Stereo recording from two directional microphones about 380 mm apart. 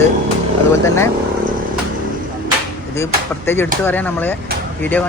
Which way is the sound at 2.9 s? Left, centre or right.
Centre.